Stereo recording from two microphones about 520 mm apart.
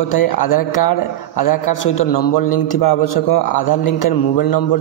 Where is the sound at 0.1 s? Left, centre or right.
Left.